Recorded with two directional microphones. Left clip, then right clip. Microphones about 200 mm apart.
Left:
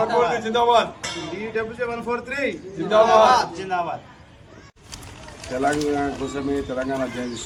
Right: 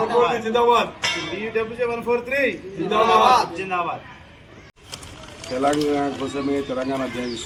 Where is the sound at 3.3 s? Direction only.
15° left (ahead or behind).